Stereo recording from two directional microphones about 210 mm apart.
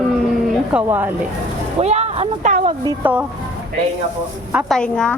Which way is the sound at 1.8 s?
30° right (ahead or behind).